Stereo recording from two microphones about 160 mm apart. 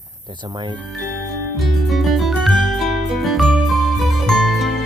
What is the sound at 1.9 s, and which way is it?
Music, centre (ahead or behind).